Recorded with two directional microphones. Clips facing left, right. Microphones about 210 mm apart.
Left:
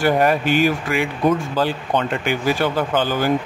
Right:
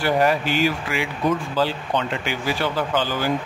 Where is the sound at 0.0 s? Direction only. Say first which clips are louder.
Left 3 dB; 50° left (ahead or behind).